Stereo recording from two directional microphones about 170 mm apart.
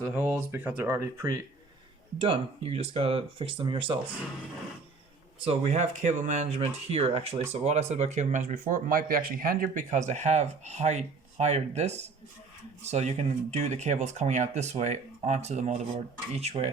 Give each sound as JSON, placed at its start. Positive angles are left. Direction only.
{"t": 0.0, "sound": "speech", "side_deg": -10}
{"t": 2.1, "sound": "speech", "side_deg": -30}
{"t": 5.5, "sound": "speech", "side_deg": -40}